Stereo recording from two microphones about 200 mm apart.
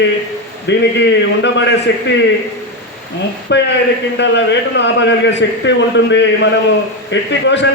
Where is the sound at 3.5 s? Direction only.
60° left (ahead or behind).